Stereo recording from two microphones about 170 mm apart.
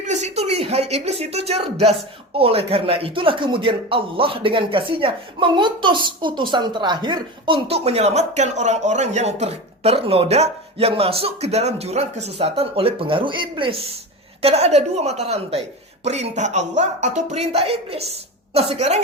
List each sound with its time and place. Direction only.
0.0 s a woman's voice: 40° right (ahead or behind)